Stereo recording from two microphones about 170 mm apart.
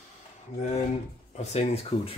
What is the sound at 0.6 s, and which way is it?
Speech, 40° left (ahead or behind).